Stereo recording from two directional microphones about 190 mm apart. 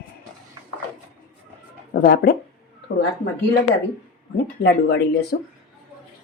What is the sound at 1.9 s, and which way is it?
Speech, 50° left (ahead or behind).